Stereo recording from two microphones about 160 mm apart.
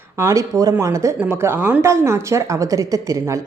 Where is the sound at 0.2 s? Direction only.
20° right (ahead or behind).